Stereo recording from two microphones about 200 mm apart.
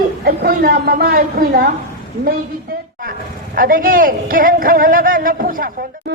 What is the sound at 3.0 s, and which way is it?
Speech, 45° right (ahead or behind).